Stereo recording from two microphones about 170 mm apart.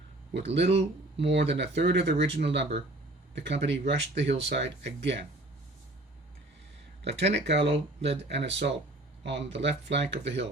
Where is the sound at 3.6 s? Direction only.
40° right (ahead or behind).